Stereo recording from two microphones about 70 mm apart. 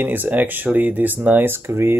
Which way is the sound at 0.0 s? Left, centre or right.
Right.